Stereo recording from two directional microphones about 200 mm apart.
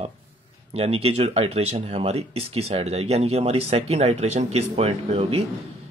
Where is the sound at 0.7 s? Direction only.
30° right (ahead or behind).